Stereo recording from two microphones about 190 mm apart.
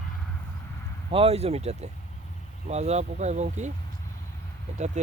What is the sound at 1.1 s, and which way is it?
Speech, 30° right (ahead or behind).